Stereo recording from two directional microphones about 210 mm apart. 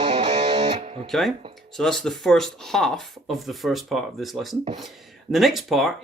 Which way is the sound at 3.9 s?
Centre (ahead or behind).